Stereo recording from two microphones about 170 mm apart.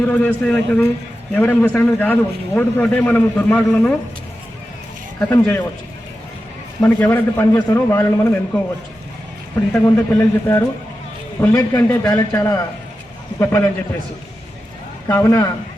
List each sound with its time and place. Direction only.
0.1 s a man's voice: 5° left (ahead or behind)
5.3 s a man's voice: 15° left (ahead or behind)
6.8 s a man's voice: 10° left (ahead or behind)
9.7 s a man's voice: 15° left (ahead or behind)
15.0 s a man's voice: 15° left (ahead or behind)